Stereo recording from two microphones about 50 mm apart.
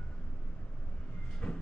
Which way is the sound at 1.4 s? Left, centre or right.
Centre.